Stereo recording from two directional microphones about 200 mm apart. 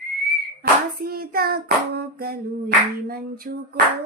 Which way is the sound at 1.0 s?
50° right (ahead or behind).